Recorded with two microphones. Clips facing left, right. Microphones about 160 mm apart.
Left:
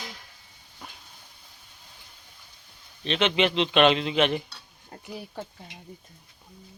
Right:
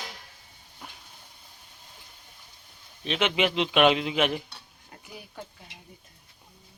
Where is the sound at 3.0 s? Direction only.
10° right (ahead or behind).